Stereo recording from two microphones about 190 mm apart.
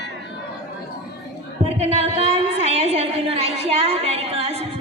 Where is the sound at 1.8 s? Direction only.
35° right (ahead or behind).